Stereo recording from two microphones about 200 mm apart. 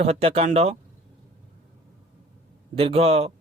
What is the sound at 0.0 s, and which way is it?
Speech, 30° right (ahead or behind).